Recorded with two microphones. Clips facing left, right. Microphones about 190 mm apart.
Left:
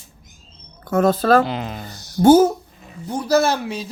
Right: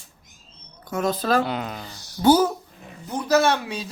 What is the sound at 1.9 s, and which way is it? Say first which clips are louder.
Speech: left 6 dB; 45° left (ahead or behind).